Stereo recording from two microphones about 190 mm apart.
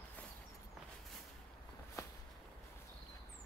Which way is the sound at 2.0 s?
15° left (ahead or behind).